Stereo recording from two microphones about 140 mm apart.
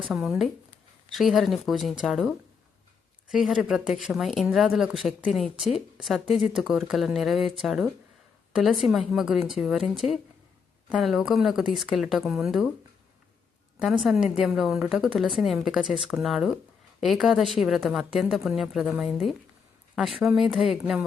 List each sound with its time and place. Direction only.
0.1 s speech: centre (ahead or behind)
13.7 s speech: 5° right (ahead or behind)